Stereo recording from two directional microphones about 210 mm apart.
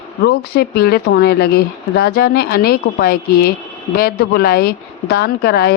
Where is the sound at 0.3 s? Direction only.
50° left (ahead or behind).